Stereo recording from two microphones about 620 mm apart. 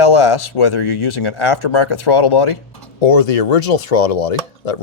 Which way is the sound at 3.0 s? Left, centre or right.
Left.